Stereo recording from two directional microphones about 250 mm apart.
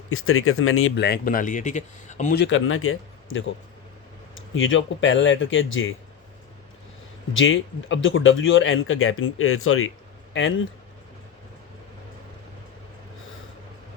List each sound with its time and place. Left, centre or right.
0.1 s speech: left
2.4 s speech: left
4.5 s speech: left
7.3 s speech: left